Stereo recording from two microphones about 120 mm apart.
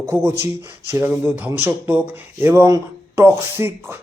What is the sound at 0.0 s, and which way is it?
A man's voice, 20° right (ahead or behind).